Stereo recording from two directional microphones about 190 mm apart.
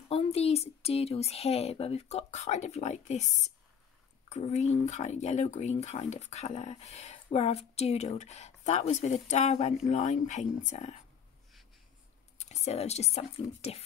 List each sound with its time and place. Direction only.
0.1 s speech: 30° left (ahead or behind)
4.3 s speech: 35° left (ahead or behind)
12.4 s speech: 35° left (ahead or behind)